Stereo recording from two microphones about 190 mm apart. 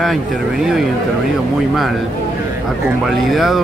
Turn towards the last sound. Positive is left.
turn(degrees=0)  # may be behind; listen again after turning